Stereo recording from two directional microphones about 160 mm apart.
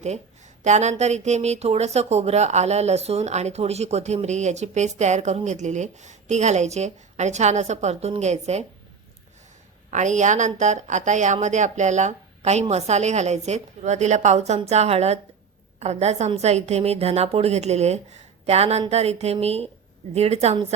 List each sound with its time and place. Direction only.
0.6 s speech: 45° right (ahead or behind)
9.9 s a woman's voice: 50° right (ahead or behind)